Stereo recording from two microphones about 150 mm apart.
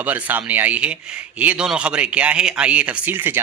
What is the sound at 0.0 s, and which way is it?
A man's voice, 10° right (ahead or behind).